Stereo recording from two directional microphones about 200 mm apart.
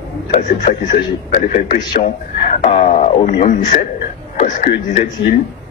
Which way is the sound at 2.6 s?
35° left (ahead or behind).